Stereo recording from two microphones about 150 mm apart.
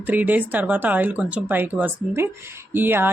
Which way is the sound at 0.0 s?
10° right (ahead or behind).